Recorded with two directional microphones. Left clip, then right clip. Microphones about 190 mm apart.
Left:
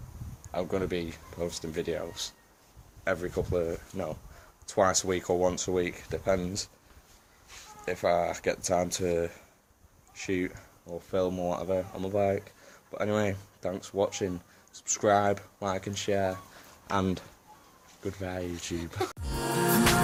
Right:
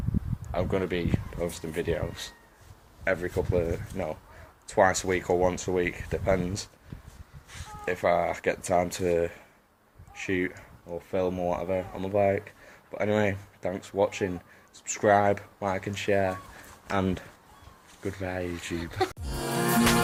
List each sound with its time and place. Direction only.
0.5 s speech: 10° left (ahead or behind)
7.9 s speech: 10° left (ahead or behind)
16.8 s speech: 20° left (ahead or behind)
18.0 s speech: 10° left (ahead or behind)
19.2 s music: centre (ahead or behind)